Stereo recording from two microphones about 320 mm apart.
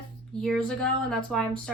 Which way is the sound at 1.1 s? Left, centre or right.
Centre.